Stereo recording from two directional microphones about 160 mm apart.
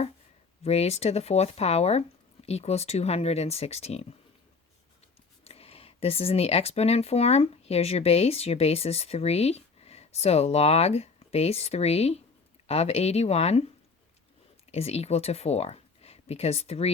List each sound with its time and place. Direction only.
0.6 s speech: 40° left (ahead or behind)
5.5 s speech: 40° left (ahead or behind)
14.7 s speech: 40° left (ahead or behind)